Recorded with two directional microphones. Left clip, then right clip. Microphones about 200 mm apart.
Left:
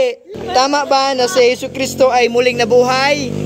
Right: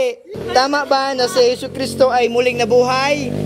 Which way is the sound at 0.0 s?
10° left (ahead or behind).